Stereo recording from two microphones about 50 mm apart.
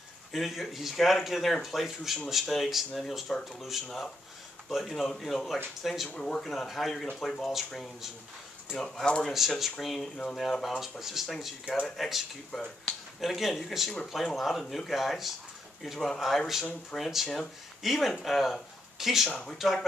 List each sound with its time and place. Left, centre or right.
0.3 s speech: centre
4.6 s speech: centre
6.1 s speech: centre
9.2 s speech: centre
11.6 s speech: centre
12.0 s speech: centre